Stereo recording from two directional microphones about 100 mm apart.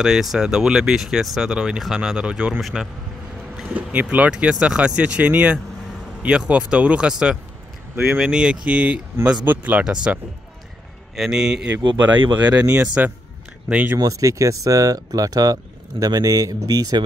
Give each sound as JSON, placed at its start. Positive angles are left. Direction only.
{"t": 0.0, "sound": "speech", "side_deg": -5}
{"t": 11.1, "sound": "speech", "side_deg": -5}
{"t": 13.9, "sound": "speech", "side_deg": -35}